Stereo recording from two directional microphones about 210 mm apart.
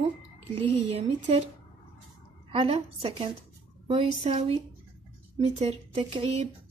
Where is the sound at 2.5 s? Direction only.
25° right (ahead or behind).